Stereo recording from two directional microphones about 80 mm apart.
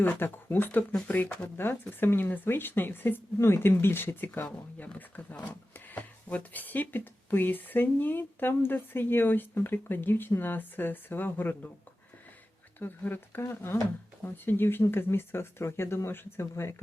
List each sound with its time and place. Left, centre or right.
0.0 s speech: left
12.8 s speech: left